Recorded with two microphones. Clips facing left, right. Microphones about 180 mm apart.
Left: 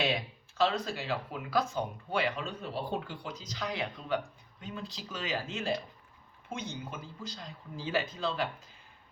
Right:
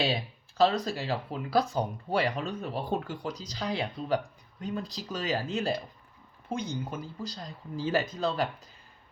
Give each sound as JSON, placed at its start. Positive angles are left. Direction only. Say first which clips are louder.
{"t": 0.0, "sound": "speech", "louder": "right 2 dB", "side_deg": -35}